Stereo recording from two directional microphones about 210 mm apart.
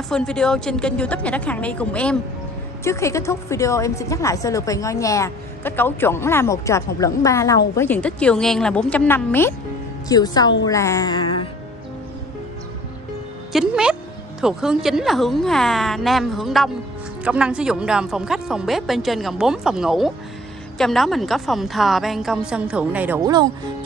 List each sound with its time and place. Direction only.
0.1 s a woman's voice: 5° left (ahead or behind)
13.5 s speech: centre (ahead or behind)